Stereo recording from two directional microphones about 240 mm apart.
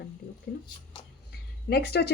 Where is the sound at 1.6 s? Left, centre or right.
Left.